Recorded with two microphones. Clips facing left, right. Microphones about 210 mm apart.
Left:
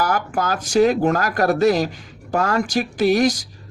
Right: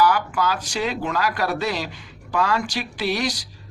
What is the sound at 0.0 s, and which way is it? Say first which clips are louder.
Speech: right 1 dB; 45° left (ahead or behind).